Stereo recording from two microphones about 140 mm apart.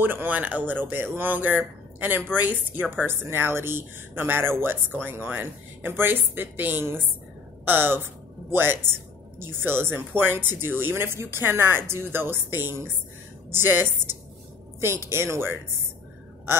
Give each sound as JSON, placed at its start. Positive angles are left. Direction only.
{"t": 0.0, "sound": "speech", "side_deg": -15}